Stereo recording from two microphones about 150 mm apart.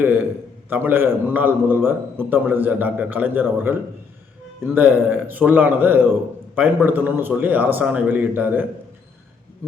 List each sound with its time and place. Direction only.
0.7 s a man's voice: 10° right (ahead or behind)